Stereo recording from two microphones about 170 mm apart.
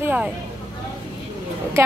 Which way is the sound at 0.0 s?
10° right (ahead or behind).